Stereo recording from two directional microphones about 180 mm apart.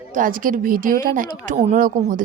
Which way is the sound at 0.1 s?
50° right (ahead or behind).